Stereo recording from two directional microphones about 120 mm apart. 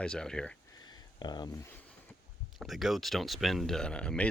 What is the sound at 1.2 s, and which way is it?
Speech, 35° left (ahead or behind).